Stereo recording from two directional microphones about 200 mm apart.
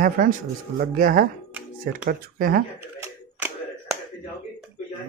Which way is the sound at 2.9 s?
10° right (ahead or behind).